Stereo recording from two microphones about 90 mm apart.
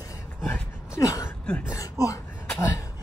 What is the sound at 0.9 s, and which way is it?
Speech, 35° left (ahead or behind).